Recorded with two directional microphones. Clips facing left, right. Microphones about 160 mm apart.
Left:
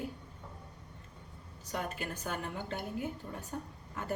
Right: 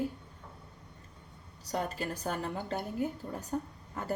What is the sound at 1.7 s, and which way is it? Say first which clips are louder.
A woman's voice: right 4 dB; 35° right (ahead or behind).